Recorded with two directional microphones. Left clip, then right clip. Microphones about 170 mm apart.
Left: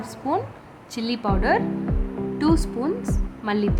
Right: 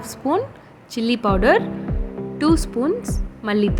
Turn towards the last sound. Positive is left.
turn(degrees=-20)  # may be behind; listen again after turning